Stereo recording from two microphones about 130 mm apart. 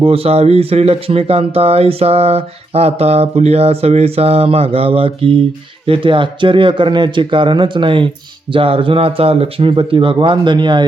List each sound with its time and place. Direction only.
0.0 s speech: 50° right (ahead or behind)